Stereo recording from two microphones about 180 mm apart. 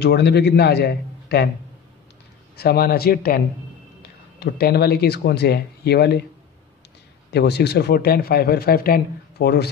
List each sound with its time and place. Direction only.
0.0 s a man's voice: 65° left (ahead or behind)
2.5 s speech: 60° left (ahead or behind)
7.3 s speech: 70° left (ahead or behind)